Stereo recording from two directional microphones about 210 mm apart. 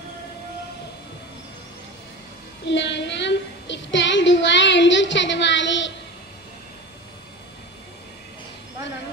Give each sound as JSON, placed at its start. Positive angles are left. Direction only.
{"t": 2.6, "sound": "child singing", "side_deg": 55}